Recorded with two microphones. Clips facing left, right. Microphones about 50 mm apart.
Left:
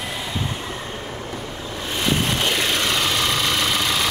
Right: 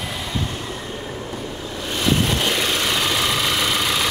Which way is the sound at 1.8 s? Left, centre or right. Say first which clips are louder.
Right 2 dB; centre.